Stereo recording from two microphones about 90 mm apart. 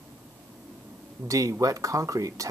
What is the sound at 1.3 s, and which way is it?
Speech, 40° right (ahead or behind).